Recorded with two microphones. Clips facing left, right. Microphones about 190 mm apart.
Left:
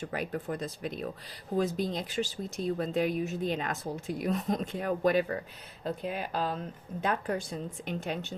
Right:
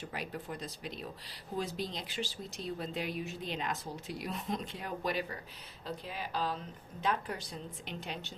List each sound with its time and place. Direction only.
0.0 s speech: 50° left (ahead or behind)